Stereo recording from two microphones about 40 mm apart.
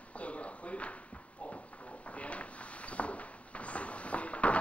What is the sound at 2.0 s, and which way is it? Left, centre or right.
Drawer open or close, left.